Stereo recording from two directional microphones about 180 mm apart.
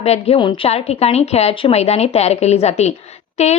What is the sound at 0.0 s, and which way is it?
A woman's voice, 35° left (ahead or behind).